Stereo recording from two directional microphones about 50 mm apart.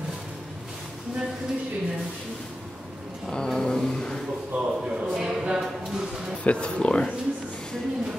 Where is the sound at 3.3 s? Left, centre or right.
Centre.